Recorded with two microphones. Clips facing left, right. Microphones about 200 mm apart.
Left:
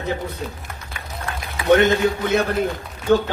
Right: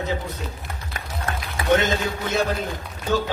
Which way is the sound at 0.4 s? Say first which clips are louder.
Left 4 dB; 55° left (ahead or behind).